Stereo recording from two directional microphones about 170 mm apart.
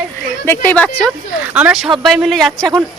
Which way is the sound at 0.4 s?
15° left (ahead or behind).